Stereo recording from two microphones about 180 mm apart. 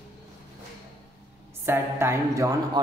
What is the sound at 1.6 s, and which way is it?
Speech, 15° right (ahead or behind).